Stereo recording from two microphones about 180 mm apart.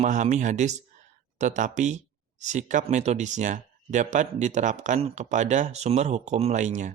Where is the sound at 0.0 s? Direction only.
40° right (ahead or behind).